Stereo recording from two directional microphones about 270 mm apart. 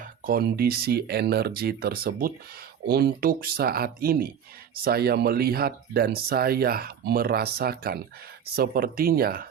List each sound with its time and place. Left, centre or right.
0.0 s speech: right